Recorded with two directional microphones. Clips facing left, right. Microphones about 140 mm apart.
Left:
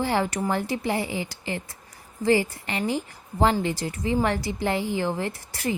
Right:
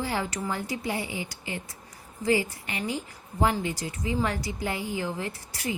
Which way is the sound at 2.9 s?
85° left.